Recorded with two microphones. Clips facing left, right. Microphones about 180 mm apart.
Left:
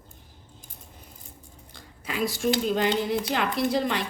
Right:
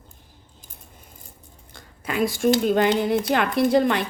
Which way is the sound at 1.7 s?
50° right (ahead or behind).